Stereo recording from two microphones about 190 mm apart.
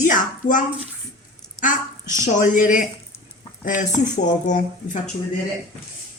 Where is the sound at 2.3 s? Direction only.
40° left (ahead or behind).